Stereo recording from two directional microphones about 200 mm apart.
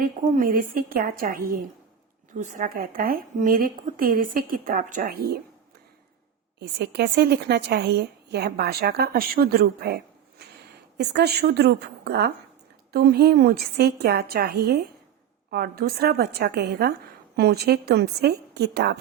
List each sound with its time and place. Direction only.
0.0 s a woman's voice: 45° right (ahead or behind)
6.6 s a woman's voice: 55° right (ahead or behind)